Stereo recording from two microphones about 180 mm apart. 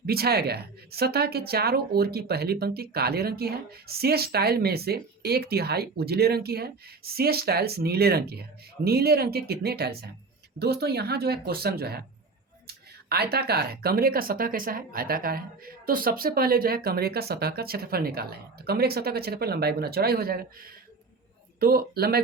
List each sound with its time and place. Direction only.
0.0 s speech: 60° right (ahead or behind)